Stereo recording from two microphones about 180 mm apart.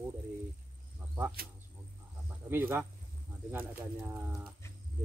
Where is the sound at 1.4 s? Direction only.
55° right (ahead or behind).